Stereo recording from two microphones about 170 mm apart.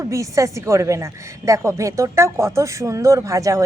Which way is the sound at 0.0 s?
15° right (ahead or behind).